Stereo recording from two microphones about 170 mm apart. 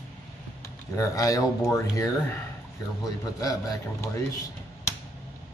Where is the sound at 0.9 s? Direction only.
20° left (ahead or behind).